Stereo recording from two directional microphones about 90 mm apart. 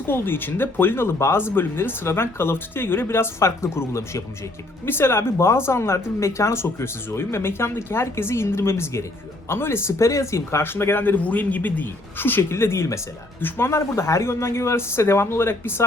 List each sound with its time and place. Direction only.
0.0 s speech: 25° left (ahead or behind)